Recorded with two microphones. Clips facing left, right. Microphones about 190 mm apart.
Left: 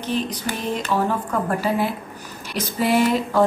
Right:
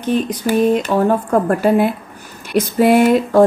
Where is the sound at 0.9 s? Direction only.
50° right (ahead or behind).